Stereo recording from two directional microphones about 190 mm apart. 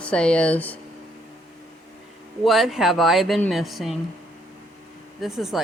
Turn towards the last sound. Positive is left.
turn(degrees=0)  # may be behind; listen again after turning